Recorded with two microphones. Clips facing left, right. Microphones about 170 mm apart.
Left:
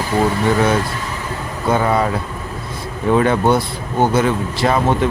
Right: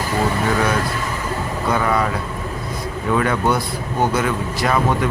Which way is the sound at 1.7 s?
30° left (ahead or behind).